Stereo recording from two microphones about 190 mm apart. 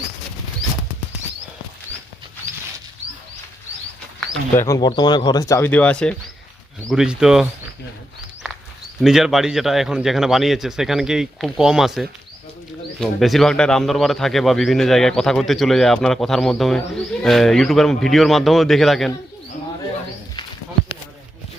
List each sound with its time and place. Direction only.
4.5 s speech: 15° left (ahead or behind); by 7.4 s 5° right (ahead or behind)
9.0 s speech: centre (ahead or behind)